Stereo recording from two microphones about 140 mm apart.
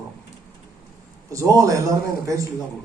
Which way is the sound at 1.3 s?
25° right (ahead or behind).